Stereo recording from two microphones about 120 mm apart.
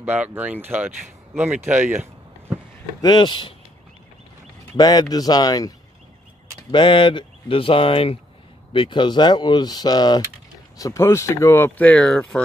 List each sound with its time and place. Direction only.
0.0 s speech: 15° right (ahead or behind)
3.0 s speech: 35° left (ahead or behind)
4.7 s speech: 35° left (ahead or behind)
6.7 s speech: 45° left (ahead or behind); by 11.9 s 20° left (ahead or behind)
11.9 s speech: 5° left (ahead or behind)